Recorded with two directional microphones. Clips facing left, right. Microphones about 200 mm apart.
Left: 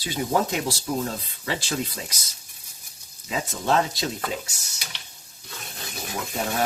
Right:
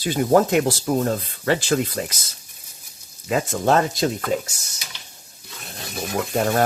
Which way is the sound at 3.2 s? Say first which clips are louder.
Right 6 dB; 55° right (ahead or behind).